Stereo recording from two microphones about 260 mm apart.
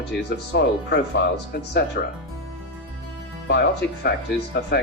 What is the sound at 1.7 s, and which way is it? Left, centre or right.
Speech, left.